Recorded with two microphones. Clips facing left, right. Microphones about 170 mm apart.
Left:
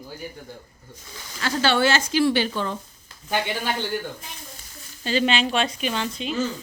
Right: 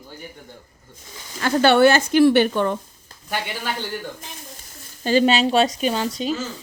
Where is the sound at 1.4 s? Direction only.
55° right (ahead or behind).